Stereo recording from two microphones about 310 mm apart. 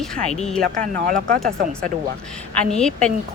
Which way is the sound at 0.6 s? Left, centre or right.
Right.